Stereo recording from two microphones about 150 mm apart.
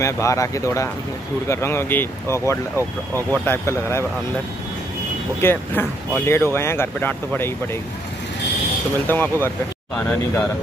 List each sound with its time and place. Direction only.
0.0 s speech: 20° left (ahead or behind)
5.4 s speech: 15° left (ahead or behind)
9.0 s speech: 15° left (ahead or behind)